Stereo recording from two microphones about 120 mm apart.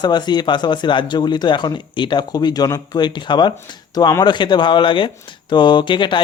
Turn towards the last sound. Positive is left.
turn(degrees=40)  # may be behind; listen again after turning